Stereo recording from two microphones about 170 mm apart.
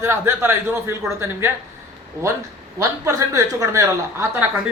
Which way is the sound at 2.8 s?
20° right (ahead or behind).